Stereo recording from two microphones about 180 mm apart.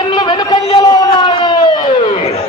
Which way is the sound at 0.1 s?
25° left (ahead or behind).